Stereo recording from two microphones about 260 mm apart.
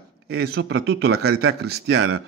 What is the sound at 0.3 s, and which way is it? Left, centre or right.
A man's voice, right.